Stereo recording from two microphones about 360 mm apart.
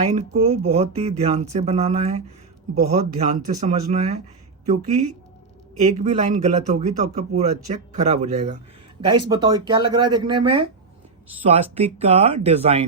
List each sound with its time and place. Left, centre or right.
0.1 s speech: centre